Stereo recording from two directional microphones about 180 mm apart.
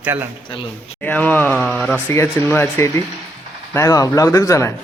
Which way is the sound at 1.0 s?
10° left (ahead or behind).